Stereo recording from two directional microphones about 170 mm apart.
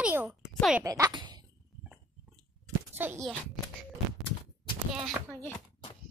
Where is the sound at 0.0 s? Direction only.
10° right (ahead or behind).